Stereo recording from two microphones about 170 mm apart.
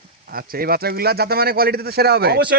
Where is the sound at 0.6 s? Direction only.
65° right (ahead or behind).